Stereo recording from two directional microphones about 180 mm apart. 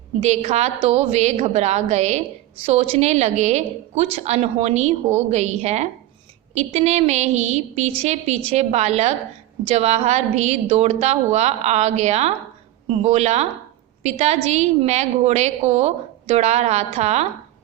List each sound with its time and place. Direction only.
0.2 s a woman's voice: 35° right (ahead or behind)